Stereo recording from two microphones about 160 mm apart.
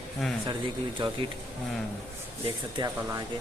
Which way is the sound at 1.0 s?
30° right (ahead or behind).